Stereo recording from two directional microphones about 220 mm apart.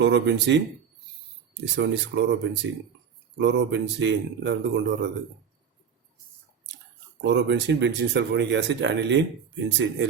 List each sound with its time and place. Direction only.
0.0 s speech: 50° right (ahead or behind)
1.7 s speech: 50° right (ahead or behind)
7.3 s speech: 50° right (ahead or behind)